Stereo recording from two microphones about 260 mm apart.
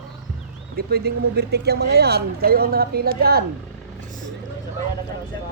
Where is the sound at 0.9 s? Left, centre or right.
Right.